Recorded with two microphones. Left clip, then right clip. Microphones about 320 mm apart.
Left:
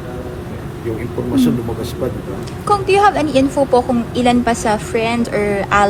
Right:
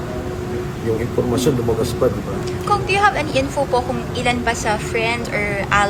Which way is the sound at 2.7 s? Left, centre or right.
Centre.